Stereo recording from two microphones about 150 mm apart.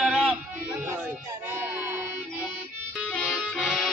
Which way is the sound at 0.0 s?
5° right (ahead or behind).